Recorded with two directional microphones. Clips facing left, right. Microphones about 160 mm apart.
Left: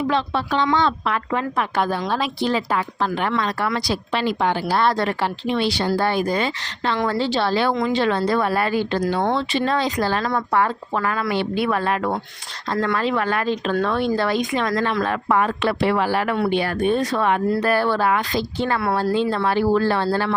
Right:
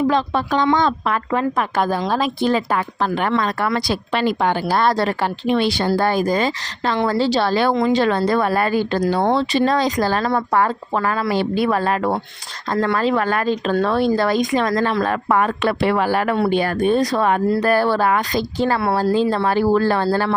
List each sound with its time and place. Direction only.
0.1 s a woman's voice: 45° right (ahead or behind)
5.5 s a woman's voice: 50° right (ahead or behind)